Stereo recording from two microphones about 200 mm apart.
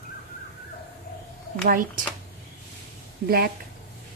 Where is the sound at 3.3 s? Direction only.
50° right (ahead or behind).